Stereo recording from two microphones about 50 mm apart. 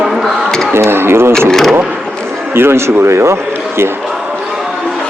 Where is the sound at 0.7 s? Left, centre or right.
Right.